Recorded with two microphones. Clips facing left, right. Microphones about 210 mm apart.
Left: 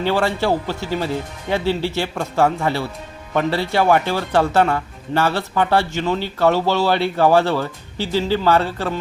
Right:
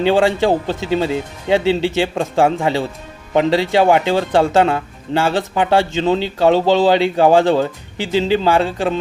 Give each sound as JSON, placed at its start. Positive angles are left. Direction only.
{"t": 0.0, "sound": "speech", "side_deg": -15}